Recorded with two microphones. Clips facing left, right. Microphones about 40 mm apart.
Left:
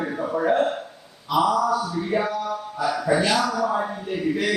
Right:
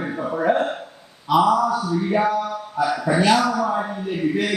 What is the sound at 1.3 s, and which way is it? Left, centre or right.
Speech, right.